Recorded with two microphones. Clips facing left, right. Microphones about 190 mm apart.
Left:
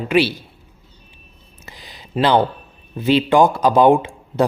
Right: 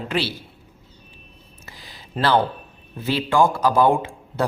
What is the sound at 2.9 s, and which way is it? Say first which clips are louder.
A man's voice: left 5 dB; 20° left (ahead or behind).